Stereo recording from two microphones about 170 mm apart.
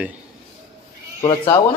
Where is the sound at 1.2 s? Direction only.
20° left (ahead or behind).